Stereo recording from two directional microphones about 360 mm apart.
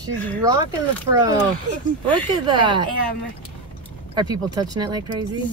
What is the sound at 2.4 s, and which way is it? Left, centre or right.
Speech, centre.